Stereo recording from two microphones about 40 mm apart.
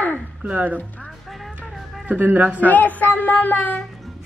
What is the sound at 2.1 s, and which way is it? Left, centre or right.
Speech, right.